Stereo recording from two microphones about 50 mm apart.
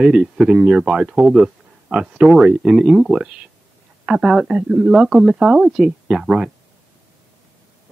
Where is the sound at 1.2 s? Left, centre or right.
Centre.